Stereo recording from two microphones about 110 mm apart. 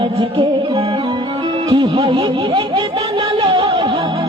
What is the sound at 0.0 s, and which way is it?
Music, 50° right (ahead or behind).